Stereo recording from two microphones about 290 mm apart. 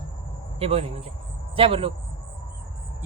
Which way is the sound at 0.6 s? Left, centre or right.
Right.